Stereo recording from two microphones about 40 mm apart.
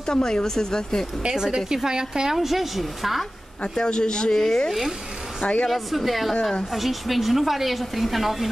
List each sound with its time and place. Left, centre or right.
0.0 s speech: centre
1.2 s a woman's voice: centre
2.3 s a woman's voice: centre
3.6 s speech: left
4.6 s a woman's voice: centre